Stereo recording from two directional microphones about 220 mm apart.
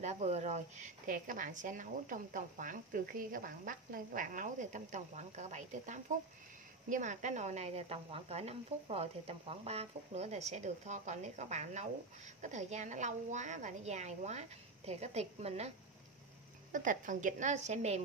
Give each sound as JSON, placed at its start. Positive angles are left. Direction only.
{"t": 0.0, "sound": "speech", "side_deg": -30}
{"t": 16.7, "sound": "speech", "side_deg": -35}